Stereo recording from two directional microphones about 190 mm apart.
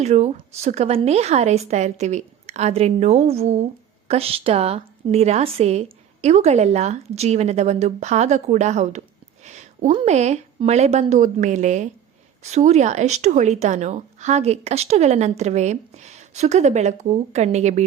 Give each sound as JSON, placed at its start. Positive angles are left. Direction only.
{"t": 0.0, "sound": "a woman's voice", "side_deg": -35}